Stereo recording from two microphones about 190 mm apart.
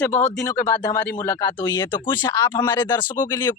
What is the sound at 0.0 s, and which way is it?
Speech, 10° left (ahead or behind).